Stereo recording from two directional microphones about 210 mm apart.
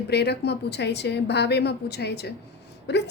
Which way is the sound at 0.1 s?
50° left (ahead or behind).